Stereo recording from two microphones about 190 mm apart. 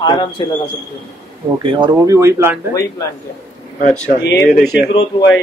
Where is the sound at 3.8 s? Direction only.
40° left (ahead or behind).